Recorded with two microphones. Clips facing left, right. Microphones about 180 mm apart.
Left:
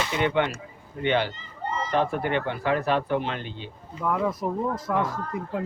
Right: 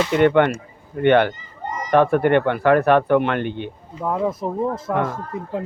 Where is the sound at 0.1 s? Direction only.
55° right (ahead or behind).